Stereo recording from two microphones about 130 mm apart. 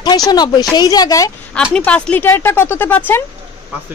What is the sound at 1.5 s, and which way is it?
Speech, 5° left (ahead or behind).